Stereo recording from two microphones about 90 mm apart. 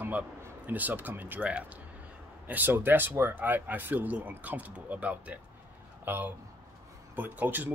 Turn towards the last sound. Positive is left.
turn(degrees=-20)  # may be behind; listen again after turning